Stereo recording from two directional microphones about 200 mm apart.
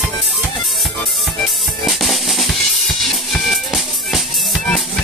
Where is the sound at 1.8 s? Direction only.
Centre (ahead or behind).